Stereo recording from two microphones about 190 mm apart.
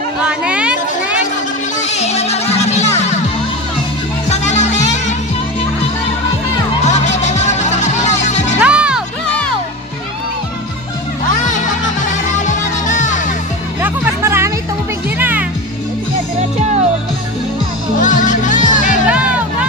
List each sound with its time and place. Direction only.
0.2 s a sound: 5° right (ahead or behind)
1.7 s music: 35° left (ahead or behind)
4.3 s music: 35° left (ahead or behind)
6.8 s music: 35° left (ahead or behind)
8.5 s music: 5° right (ahead or behind)
11.4 s music: 40° left (ahead or behind)
13.8 s music: 15° right (ahead or behind)
18.0 s music: 40° left (ahead or behind)
19.1 s music: 5° right (ahead or behind)